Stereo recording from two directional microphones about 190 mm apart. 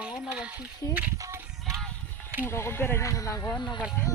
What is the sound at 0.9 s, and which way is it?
Music, 15° right (ahead or behind).